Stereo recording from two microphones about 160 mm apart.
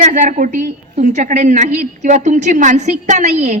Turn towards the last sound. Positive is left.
turn(degrees=-45)  # may be behind; listen again after turning